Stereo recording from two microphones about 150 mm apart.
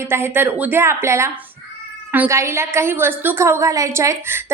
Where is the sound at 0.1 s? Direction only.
15° right (ahead or behind).